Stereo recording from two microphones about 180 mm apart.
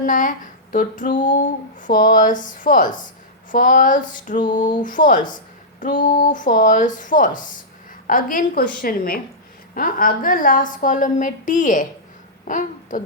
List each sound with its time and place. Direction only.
0.0 s a woman's voice: 45° left (ahead or behind)